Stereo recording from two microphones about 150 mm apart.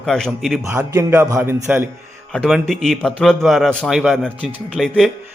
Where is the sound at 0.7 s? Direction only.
15° right (ahead or behind).